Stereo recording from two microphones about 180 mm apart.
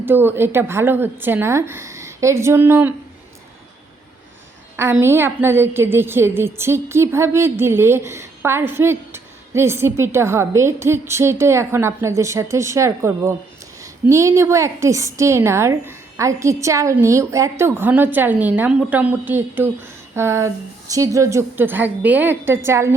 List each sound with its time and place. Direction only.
0.0 s a woman's voice: 10° right (ahead or behind)
4.8 s a woman's voice: 15° right (ahead or behind)